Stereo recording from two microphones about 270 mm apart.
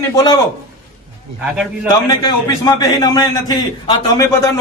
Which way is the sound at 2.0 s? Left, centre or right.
Centre.